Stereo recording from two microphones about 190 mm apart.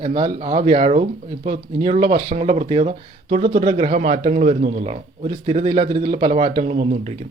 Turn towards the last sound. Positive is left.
turn(degrees=-35)  # may be behind; listen again after turning